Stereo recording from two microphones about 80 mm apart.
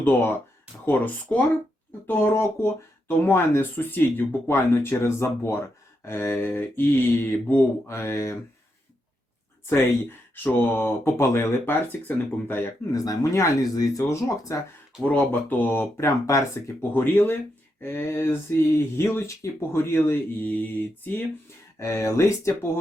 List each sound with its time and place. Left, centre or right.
0.0 s speech: left
9.6 s speech: left
12.9 s speech: left
15.0 s speech: left
16.9 s speech: left
21.8 s speech: left